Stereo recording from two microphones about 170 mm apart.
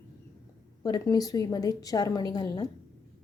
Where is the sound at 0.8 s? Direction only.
20° left (ahead or behind).